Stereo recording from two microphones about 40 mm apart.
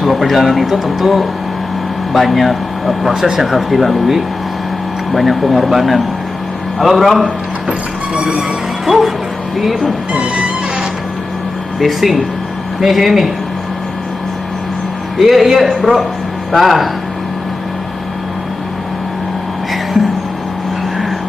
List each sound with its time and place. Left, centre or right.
0.0 s speech: centre
8.4 s speech: centre
10.1 s music: right
11.8 s speech: centre
15.1 s speech: centre